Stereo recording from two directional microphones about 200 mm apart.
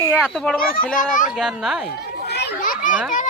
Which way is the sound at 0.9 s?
40° left (ahead or behind).